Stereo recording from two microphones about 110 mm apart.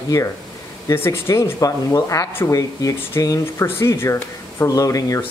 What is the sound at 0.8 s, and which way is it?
Speech, 20° left (ahead or behind).